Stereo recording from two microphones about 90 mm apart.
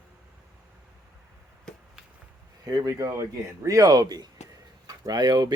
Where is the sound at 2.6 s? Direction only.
45° right (ahead or behind).